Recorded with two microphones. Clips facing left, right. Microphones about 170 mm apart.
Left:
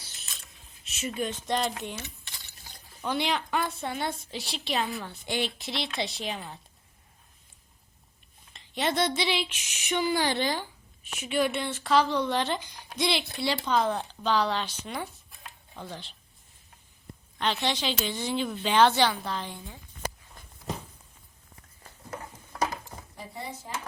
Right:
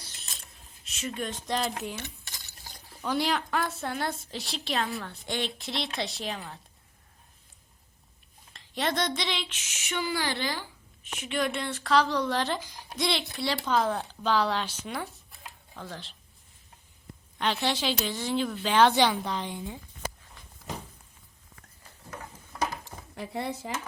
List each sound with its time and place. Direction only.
0.9 s speech: 5° left (ahead or behind)
2.0 s stir: 50° right (ahead or behind)
3.0 s a woman's voice: centre (ahead or behind)
8.5 s a sound: centre (ahead or behind); by 10.7 s 20° left (ahead or behind)
11.2 s a woman's voice: 10° left (ahead or behind)
17.3 s a woman's voice: 5° right (ahead or behind)
18.9 s a woman's voice: 15° right (ahead or behind)
22.8 s chopping: 75° right (ahead or behind)